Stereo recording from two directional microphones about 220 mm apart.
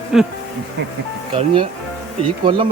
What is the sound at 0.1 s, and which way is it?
Speech, centre (ahead or behind).